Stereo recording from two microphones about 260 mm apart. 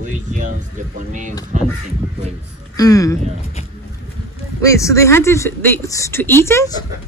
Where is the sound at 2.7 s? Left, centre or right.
Centre.